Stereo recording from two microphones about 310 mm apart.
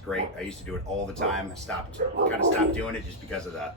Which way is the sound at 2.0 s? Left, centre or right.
Right.